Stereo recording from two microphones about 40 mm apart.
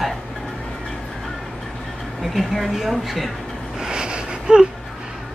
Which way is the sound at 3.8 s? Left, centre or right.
Centre.